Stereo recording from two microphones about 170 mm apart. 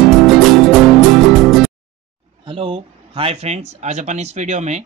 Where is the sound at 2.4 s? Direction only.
30° right (ahead or behind).